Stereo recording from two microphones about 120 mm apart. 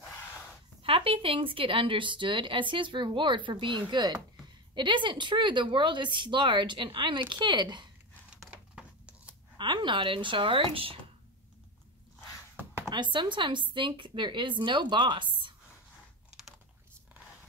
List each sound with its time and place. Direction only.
0.8 s a woman's voice: 50° right (ahead or behind)
8.3 s a sound: 10° right (ahead or behind)
9.6 s speech: 40° right (ahead or behind)
12.9 s a woman's voice: 40° right (ahead or behind)